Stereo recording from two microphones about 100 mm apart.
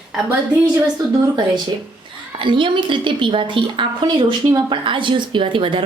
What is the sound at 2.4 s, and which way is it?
A woman's voice, 55° right (ahead or behind).